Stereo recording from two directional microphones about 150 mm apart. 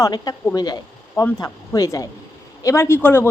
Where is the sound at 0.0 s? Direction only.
25° left (ahead or behind).